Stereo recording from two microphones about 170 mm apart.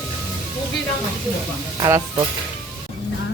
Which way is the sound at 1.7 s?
20° right (ahead or behind).